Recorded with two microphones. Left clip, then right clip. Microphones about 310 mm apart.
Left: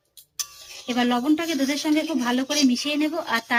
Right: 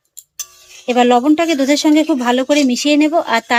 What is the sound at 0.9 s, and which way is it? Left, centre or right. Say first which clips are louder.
Speech: right 11 dB; centre.